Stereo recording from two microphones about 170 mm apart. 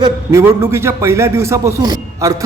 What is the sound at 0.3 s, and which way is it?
A man's voice, 15° right (ahead or behind).